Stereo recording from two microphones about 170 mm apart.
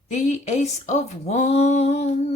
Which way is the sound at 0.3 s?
40° left (ahead or behind).